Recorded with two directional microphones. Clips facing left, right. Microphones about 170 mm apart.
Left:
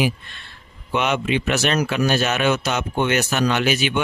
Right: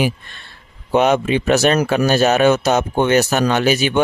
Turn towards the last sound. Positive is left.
turn(degrees=-40)  # may be behind; listen again after turning